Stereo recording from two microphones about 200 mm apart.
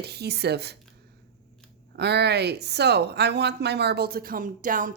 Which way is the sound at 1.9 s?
55° right (ahead or behind).